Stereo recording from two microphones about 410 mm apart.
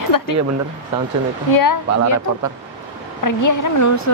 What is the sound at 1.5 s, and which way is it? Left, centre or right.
Speech, left.